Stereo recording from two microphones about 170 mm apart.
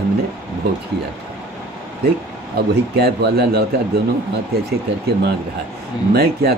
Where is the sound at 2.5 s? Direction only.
70° right (ahead or behind).